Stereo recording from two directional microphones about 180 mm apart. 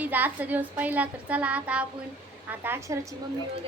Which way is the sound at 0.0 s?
10° right (ahead or behind).